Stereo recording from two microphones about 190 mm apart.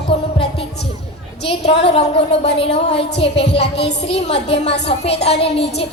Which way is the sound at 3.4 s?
60° left (ahead or behind).